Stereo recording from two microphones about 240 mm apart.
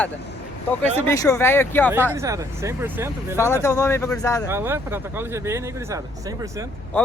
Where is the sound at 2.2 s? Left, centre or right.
Centre.